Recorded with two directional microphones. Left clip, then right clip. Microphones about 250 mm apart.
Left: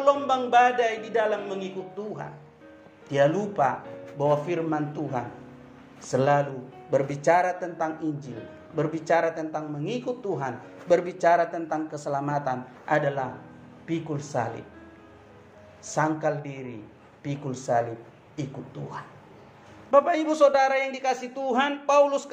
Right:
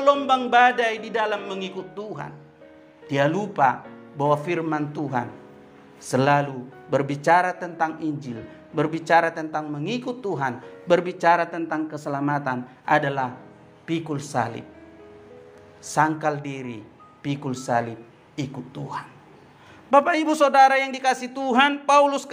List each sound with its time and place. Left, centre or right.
0.0 s a man's voice: right
15.9 s a man's voice: right